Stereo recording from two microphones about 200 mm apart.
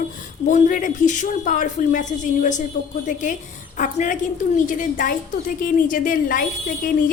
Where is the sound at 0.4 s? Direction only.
40° left (ahead or behind).